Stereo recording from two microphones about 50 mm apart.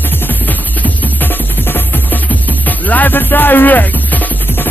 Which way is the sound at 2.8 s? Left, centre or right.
Left.